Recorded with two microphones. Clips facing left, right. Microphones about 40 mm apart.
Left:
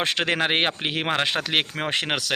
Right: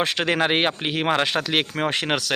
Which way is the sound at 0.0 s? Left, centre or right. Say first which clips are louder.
Right 1 dB; left.